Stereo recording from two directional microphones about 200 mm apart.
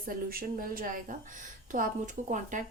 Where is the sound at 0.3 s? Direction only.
45° right (ahead or behind).